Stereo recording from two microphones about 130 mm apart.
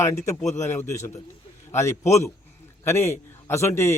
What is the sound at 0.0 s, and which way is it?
A man's voice, 25° left (ahead or behind).